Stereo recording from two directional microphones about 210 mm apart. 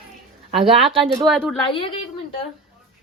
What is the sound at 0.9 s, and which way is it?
Speech, 25° right (ahead or behind).